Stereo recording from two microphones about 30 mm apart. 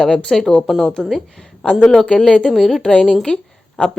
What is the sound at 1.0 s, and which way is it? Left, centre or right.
Speech, centre.